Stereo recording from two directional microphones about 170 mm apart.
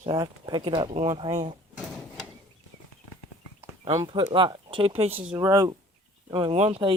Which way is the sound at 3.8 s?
25° right (ahead or behind).